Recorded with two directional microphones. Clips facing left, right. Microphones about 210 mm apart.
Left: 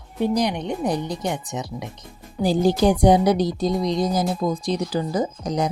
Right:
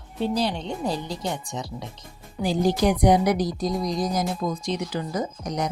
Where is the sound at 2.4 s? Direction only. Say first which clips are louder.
Left 3 dB; 30° left (ahead or behind).